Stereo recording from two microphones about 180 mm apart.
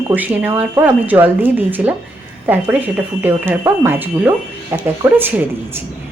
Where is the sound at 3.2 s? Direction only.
10° right (ahead or behind).